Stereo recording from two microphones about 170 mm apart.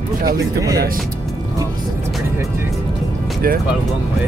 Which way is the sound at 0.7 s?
55° right (ahead or behind).